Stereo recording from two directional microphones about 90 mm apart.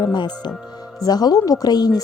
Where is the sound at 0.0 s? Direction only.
50° left (ahead or behind).